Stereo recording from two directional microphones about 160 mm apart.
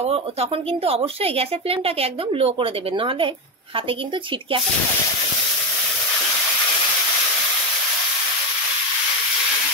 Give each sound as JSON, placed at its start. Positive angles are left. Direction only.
{"t": 0.0, "sound": "speech", "side_deg": -40}